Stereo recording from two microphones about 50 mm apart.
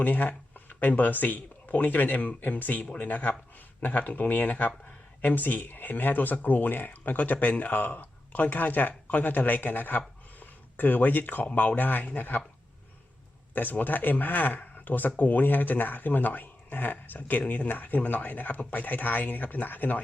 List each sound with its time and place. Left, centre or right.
0.0 s speech: left
13.5 s speech: left